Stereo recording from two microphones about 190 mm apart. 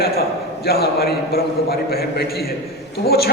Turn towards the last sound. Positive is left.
turn(degrees=55)  # may be behind; listen again after turning